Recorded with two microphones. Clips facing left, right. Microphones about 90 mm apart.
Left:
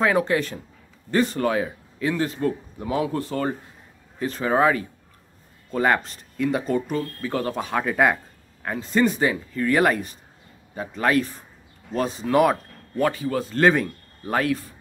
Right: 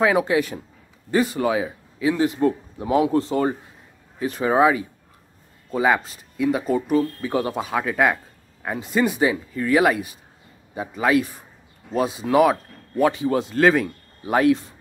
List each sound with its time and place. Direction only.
0.0 s a man's voice: 10° right (ahead or behind)
8.6 s a man's voice: 10° right (ahead or behind)
13.1 s speech: 20° right (ahead or behind)
13.6 s speech: centre (ahead or behind)
14.3 s speech: 20° right (ahead or behind)